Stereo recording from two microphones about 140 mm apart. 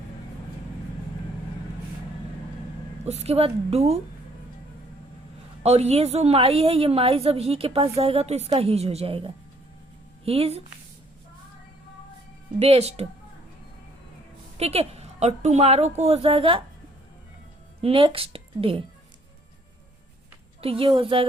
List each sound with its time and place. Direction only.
3.0 s a woman's voice: 50° right (ahead or behind)
5.6 s a woman's voice: 50° right (ahead or behind)
12.5 s a woman's voice: 50° right (ahead or behind)
14.6 s a woman's voice: 50° right (ahead or behind)
17.7 s a woman's voice: 40° right (ahead or behind)
20.6 s a woman's voice: 40° right (ahead or behind)